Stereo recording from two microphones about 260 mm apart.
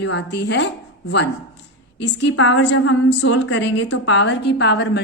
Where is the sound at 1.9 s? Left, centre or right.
Left.